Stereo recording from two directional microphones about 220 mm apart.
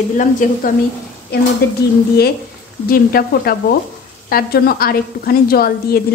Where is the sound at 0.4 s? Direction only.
35° left (ahead or behind).